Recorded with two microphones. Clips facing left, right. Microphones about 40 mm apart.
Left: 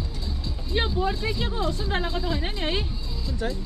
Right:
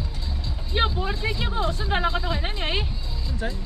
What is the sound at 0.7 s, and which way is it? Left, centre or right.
Speech, centre.